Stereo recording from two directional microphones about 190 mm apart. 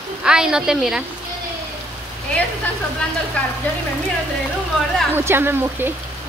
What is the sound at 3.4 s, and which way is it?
Speech, 5° left (ahead or behind).